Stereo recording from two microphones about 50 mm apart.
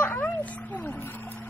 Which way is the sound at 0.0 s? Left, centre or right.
Left.